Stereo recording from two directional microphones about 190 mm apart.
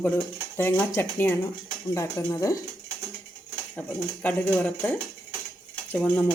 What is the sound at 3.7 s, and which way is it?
Speech, 5° left (ahead or behind).